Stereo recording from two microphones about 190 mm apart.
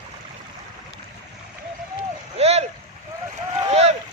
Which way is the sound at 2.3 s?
35° right (ahead or behind).